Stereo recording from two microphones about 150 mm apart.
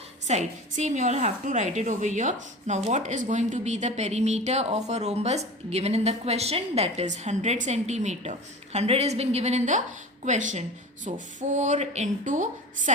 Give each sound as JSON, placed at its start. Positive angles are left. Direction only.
{"t": 0.3, "sound": "a woman's voice", "side_deg": -50}